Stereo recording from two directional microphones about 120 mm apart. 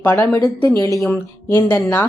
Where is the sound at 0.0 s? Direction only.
20° left (ahead or behind).